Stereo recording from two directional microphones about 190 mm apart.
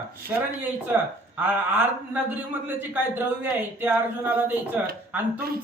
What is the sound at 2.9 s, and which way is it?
Speech, 10° right (ahead or behind).